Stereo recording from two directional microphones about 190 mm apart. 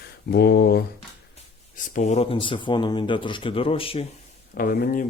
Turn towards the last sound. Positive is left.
turn(degrees=50)  # may be behind; listen again after turning